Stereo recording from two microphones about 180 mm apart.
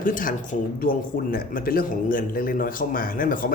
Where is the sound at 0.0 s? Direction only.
50° left (ahead or behind).